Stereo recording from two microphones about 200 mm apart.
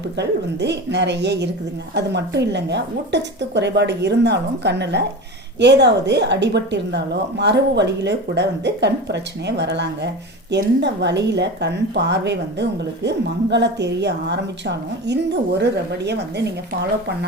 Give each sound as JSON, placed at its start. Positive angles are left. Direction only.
{"t": 0.2, "sound": "a woman's voice", "side_deg": -60}